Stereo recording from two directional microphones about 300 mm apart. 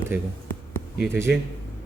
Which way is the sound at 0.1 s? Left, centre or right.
Centre.